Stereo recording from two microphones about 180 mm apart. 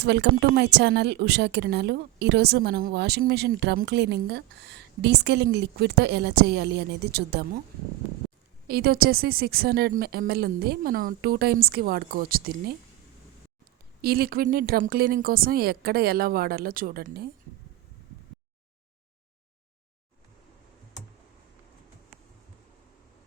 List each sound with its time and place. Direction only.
0.0 s a woman's voice: 70° right (ahead or behind)
8.6 s speech: 60° right (ahead or behind)
14.0 s speech: 55° right (ahead or behind)